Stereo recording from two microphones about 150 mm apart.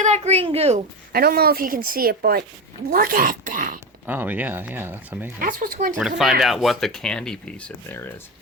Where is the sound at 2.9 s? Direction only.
70° right (ahead or behind).